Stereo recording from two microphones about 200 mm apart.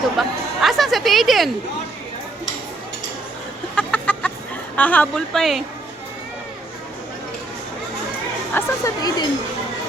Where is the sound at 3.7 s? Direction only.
5° left (ahead or behind).